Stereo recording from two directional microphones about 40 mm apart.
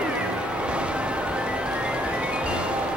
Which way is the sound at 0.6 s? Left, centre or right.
Right.